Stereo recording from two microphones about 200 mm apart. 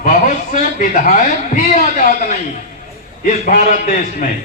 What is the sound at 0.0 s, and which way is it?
A man's voice, 40° left (ahead or behind).